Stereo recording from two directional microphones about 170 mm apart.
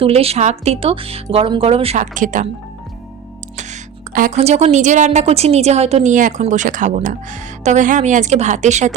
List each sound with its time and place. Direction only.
0.0 s speech: 35° right (ahead or behind)
3.6 s speech: 50° right (ahead or behind)